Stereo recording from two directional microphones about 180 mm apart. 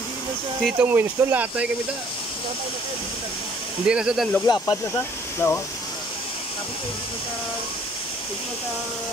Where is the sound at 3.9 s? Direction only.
5° right (ahead or behind).